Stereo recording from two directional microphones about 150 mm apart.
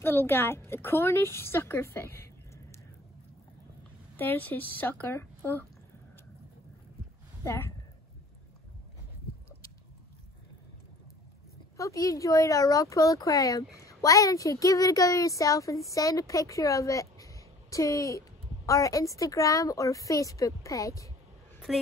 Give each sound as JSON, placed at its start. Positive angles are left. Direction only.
{"t": 0.0, "sound": "speech", "side_deg": 15}
{"t": 2.0, "sound": "a sound", "side_deg": 15}
{"t": 4.2, "sound": "speech", "side_deg": 10}
{"t": 7.4, "sound": "speech", "side_deg": 15}
{"t": 11.7, "sound": "a woman's voice", "side_deg": 20}
{"t": 21.7, "sound": "a woman's voice", "side_deg": 0}